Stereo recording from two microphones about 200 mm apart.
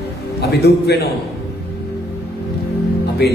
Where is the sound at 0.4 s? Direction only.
50° left (ahead or behind).